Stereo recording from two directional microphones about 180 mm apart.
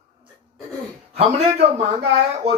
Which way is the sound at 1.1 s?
35° right (ahead or behind).